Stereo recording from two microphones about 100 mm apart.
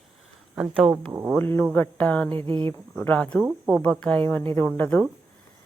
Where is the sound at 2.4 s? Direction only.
60° right (ahead or behind).